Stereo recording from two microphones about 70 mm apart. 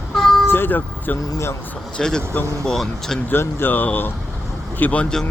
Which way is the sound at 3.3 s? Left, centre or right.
Left.